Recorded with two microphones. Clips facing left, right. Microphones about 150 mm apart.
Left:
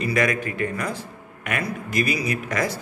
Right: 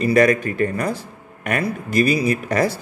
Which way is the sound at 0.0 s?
35° right (ahead or behind).